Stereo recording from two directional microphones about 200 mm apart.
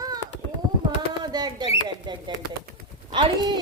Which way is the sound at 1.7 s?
20° right (ahead or behind).